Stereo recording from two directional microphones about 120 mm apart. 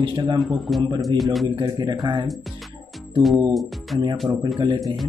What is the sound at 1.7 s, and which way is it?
Speech, 40° right (ahead or behind).